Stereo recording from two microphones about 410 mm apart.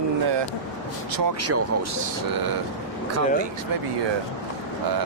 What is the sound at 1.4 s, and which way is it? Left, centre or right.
Speech, right.